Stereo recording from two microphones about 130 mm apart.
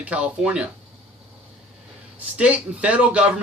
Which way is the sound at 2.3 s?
10° right (ahead or behind).